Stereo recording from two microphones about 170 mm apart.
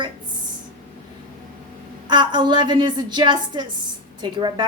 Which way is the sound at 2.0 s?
25° right (ahead or behind).